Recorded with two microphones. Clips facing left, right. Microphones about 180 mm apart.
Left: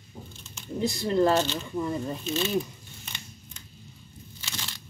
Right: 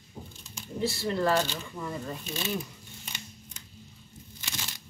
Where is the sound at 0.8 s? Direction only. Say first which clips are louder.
Left 4 dB; 20° left (ahead or behind).